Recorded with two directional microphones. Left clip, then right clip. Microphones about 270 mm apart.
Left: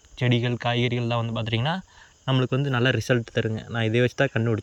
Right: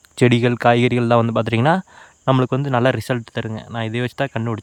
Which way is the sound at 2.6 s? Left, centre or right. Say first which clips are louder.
Right 6 dB; centre.